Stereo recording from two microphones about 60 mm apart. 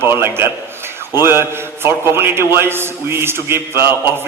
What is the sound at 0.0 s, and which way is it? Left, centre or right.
A man's voice, right.